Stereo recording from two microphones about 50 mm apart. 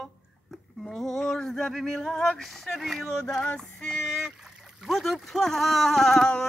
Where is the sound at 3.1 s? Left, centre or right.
Centre.